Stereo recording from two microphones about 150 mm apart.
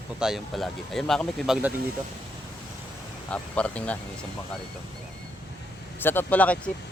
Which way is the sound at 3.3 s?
10° left (ahead or behind).